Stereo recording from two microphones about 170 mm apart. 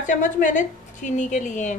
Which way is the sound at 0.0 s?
50° left (ahead or behind).